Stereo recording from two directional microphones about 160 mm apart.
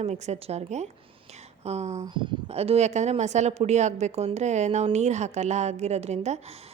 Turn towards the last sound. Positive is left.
turn(degrees=-40)  # may be behind; listen again after turning